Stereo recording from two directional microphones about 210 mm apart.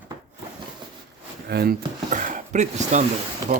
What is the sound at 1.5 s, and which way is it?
Speech, 50° right (ahead or behind).